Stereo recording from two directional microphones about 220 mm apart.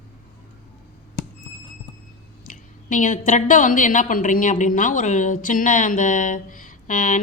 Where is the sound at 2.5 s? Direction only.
35° left (ahead or behind).